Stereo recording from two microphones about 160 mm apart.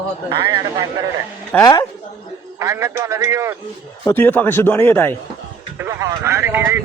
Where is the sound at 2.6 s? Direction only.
20° right (ahead or behind).